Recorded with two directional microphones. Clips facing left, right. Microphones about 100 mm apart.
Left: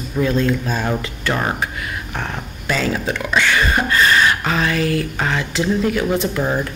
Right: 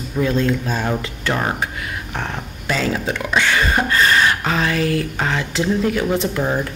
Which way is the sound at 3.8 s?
35° right (ahead or behind).